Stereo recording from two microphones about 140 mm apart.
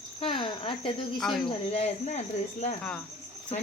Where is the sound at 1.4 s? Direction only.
45° left (ahead or behind).